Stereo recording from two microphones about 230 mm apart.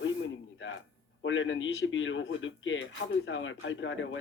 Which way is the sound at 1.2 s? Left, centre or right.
Left.